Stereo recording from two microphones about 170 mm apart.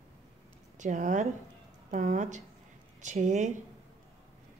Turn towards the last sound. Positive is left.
turn(degrees=-45)  # may be behind; listen again after turning